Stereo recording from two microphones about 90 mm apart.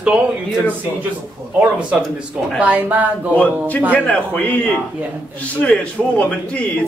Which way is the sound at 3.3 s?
15° left (ahead or behind).